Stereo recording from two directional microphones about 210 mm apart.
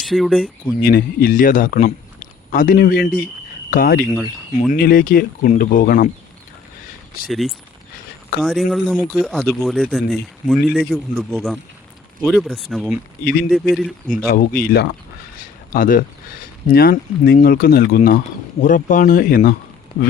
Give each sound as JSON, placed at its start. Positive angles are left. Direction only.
{"t": 0.0, "sound": "speech", "side_deg": 0}
{"t": 0.8, "sound": "speech", "side_deg": 45}
{"t": 4.1, "sound": "speech", "side_deg": 0}
{"t": 4.7, "sound": "speech", "side_deg": 45}
{"t": 7.3, "sound": "speech", "side_deg": 0}
{"t": 14.3, "sound": "speech", "side_deg": 45}